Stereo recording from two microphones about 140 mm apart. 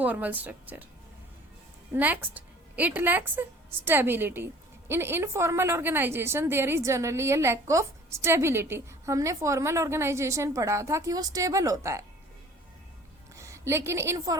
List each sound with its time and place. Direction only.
0.0 s a woman's voice: 10° right (ahead or behind)
1.9 s a woman's voice: 15° right (ahead or behind)
13.3 s a woman's voice: 20° right (ahead or behind)